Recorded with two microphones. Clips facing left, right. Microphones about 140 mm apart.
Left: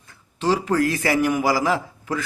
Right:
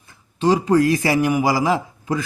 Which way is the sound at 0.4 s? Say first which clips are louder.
Right 4 dB; 15° right (ahead or behind).